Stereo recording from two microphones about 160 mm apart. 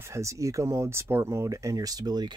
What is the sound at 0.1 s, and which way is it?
Speech, 20° right (ahead or behind).